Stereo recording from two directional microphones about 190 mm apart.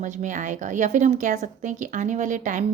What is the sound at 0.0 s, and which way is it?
Speech, 40° right (ahead or behind).